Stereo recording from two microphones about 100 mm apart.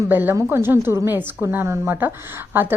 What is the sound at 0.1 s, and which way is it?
A woman's voice, 20° right (ahead or behind).